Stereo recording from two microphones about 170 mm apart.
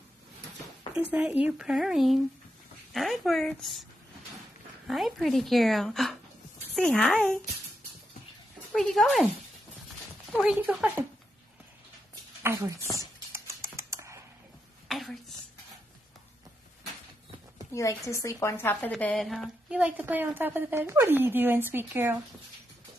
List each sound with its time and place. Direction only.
1.1 s speech: 10° right (ahead or behind)
4.8 s speech: centre (ahead or behind)
8.7 s speech: centre (ahead or behind)
10.4 s speech: 5° right (ahead or behind)
12.4 s speech: 20° right (ahead or behind)
13.3 s typing: 15° right (ahead or behind)
14.9 s a sound: centre (ahead or behind)
17.7 s a woman's voice: 20° left (ahead or behind); by 22.2 s 15° right (ahead or behind)